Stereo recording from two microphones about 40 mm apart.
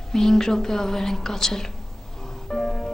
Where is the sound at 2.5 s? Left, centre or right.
Centre.